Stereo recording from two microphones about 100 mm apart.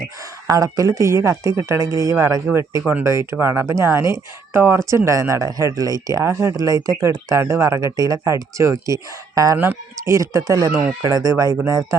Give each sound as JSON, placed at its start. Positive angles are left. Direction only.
{"t": 0.2, "sound": "speech", "side_deg": -35}